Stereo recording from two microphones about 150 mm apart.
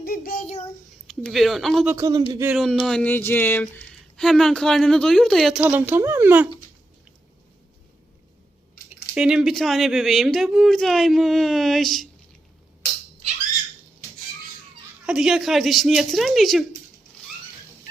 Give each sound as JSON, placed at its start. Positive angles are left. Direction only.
{"t": 0.0, "sound": "child singing", "side_deg": 80}
{"t": 1.0, "sound": "speech", "side_deg": 0}
{"t": 1.9, "sound": "a man's voice", "side_deg": -20}
{"t": 2.6, "sound": "speech", "side_deg": 0}
{"t": 9.1, "sound": "speech", "side_deg": -5}
{"t": 15.0, "sound": "speech", "side_deg": -5}